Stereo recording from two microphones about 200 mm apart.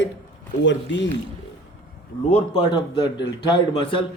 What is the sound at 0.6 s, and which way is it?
Speech, 65° left (ahead or behind).